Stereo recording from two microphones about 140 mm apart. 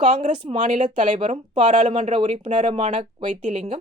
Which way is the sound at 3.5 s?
40° right (ahead or behind).